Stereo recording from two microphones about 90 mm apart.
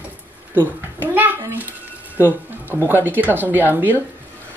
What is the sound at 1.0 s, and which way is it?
Speech, 20° right (ahead or behind).